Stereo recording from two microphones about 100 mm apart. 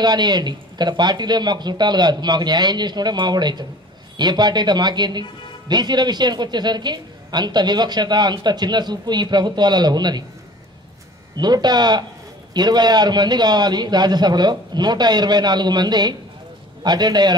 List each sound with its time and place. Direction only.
0.0 s a man's voice: 45° right (ahead or behind)
11.3 s a man's voice: 45° right (ahead or behind)